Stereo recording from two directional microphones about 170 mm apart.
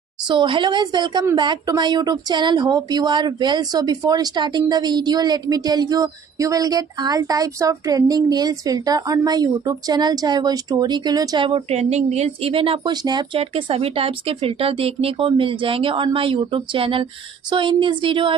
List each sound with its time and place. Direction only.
0.3 s speech: 30° right (ahead or behind)